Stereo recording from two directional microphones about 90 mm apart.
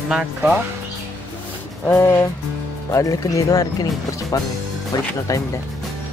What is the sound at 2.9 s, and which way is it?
Speech, 35° left (ahead or behind).